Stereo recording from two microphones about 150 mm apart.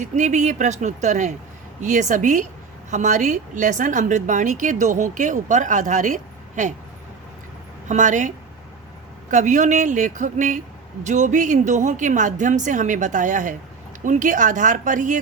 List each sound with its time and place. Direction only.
0.0 s a woman's voice: 55° right (ahead or behind)
7.9 s a woman's voice: 55° right (ahead or behind)
9.3 s a woman's voice: 55° right (ahead or behind)